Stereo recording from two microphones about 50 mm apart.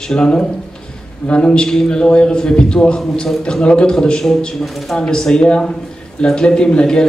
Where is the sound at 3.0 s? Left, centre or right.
Centre.